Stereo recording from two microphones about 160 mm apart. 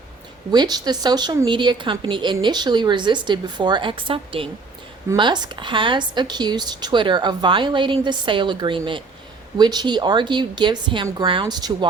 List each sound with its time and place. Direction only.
0.5 s speech: 25° right (ahead or behind)